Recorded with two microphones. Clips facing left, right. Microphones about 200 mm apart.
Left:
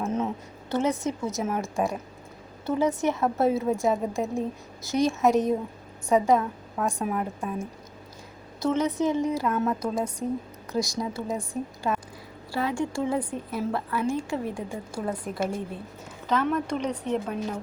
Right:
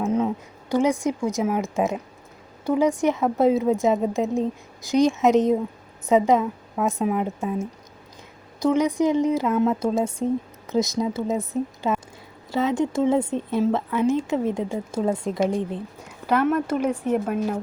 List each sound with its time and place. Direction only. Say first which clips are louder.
0.0 s a sound: right 5 dB; 10° right (ahead or behind)
0.7 s a woman's voice: right 5 dB; 15° right (ahead or behind)
8.6 s a woman's voice: right 4 dB; 15° right (ahead or behind)
16.2 s a woman's voice: right 5 dB; 10° right (ahead or behind)